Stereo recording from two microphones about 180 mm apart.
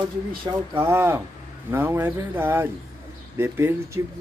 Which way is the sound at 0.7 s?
15° right (ahead or behind).